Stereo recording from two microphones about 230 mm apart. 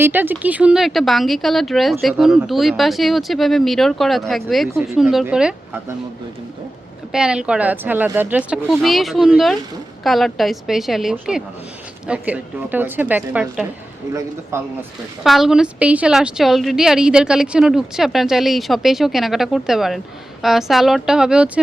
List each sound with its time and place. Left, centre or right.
0.0 s a woman's voice: centre
7.1 s a woman's voice: centre
15.2 s a woman's voice: centre